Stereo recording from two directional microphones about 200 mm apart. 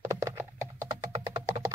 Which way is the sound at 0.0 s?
10° right (ahead or behind).